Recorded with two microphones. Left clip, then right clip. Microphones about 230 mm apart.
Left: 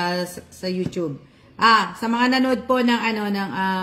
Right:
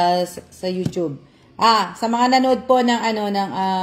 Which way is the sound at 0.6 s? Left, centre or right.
Right.